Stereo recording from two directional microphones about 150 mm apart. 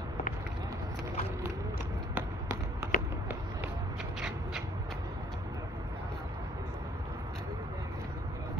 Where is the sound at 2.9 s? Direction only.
70° left (ahead or behind).